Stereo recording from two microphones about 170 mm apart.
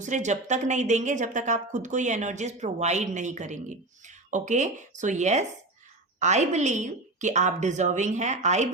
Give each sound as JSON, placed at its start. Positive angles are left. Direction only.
{"t": 0.0, "sound": "a woman's voice", "side_deg": -45}